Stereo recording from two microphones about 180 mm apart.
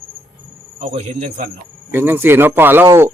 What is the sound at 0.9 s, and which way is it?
Speech, 35° right (ahead or behind).